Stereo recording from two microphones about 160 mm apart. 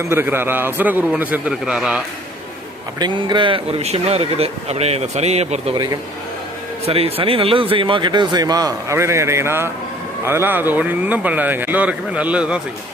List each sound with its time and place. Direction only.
0.0 s a man's voice: 15° right (ahead or behind)
3.0 s speech: 30° right (ahead or behind)
5.7 s speech: 25° right (ahead or behind)
6.8 s a man's voice: 35° right (ahead or behind); by 12.6 s 5° right (ahead or behind)